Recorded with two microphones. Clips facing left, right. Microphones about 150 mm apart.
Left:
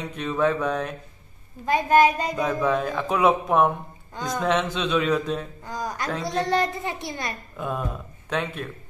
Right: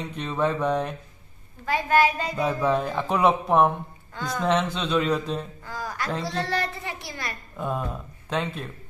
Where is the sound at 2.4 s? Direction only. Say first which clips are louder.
Right 1 dB; 15° right (ahead or behind).